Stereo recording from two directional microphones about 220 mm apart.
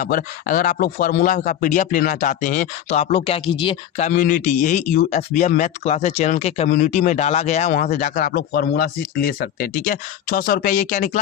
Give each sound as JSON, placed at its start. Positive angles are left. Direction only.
{"t": 0.0, "sound": "speech", "side_deg": 40}